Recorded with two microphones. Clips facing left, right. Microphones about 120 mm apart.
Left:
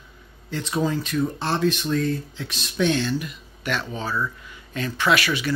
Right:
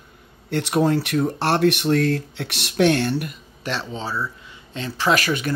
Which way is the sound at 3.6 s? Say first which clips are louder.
Even; 30° right (ahead or behind).